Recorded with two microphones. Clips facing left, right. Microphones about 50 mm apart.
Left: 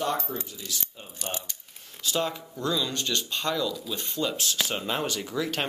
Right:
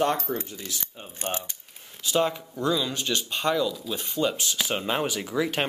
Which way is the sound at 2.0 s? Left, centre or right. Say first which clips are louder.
Right 4 dB; centre.